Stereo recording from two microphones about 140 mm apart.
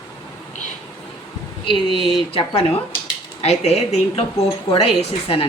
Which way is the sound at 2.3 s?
45° left (ahead or behind).